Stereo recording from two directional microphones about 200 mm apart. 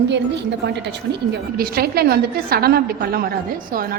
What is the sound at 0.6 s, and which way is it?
A woman's voice, 60° right (ahead or behind).